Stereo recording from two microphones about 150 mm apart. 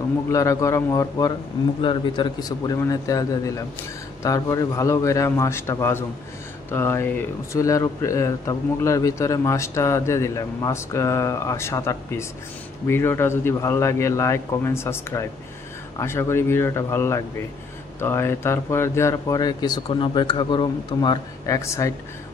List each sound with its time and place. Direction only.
0.3 s speech: 20° left (ahead or behind)
1.8 s a man's voice: 35° left (ahead or behind); by 21.9 s 20° left (ahead or behind)